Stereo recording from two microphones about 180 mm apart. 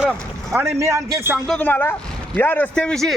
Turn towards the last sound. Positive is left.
turn(degrees=5)  # may be behind; listen again after turning